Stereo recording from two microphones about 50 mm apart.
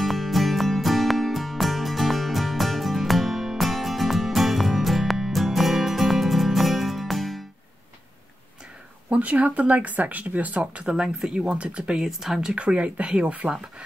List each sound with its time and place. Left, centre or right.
0.0 s music: centre
9.1 s speech: right; by 12.5 s centre
12.5 s speech: right